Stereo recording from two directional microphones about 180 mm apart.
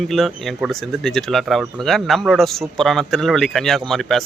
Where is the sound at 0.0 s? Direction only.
Centre (ahead or behind).